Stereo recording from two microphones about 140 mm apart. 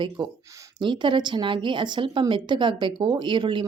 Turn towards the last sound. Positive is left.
turn(degrees=-35)  # may be behind; listen again after turning